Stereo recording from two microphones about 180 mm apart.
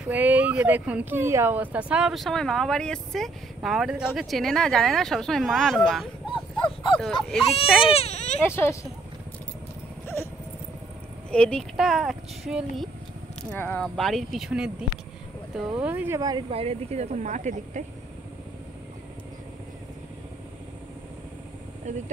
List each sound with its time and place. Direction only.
0.0 s speech: 10° right (ahead or behind)
6.3 s a sound: 25° left (ahead or behind)
7.0 s speech: centre (ahead or behind)
7.8 s speech: 35° left (ahead or behind)
8.5 s speech: 15° left (ahead or behind)
11.2 s speech: 5° left (ahead or behind); by 17.8 s 45° right (ahead or behind)
21.9 s speech: 40° right (ahead or behind)